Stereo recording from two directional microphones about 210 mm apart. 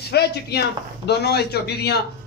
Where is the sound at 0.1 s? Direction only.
50° left (ahead or behind).